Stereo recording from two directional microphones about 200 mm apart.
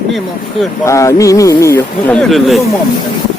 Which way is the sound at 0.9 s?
15° left (ahead or behind).